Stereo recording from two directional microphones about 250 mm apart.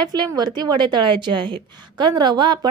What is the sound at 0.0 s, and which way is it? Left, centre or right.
A woman's voice, centre.